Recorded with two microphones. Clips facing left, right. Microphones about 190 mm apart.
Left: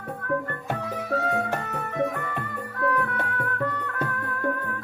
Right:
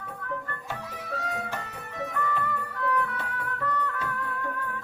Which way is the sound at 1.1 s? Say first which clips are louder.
Left 8 dB; 60° left (ahead or behind).